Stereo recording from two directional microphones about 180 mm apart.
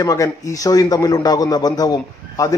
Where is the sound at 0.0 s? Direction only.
20° left (ahead or behind).